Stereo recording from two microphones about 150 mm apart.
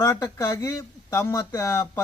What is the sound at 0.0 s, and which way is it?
Speech, 20° left (ahead or behind).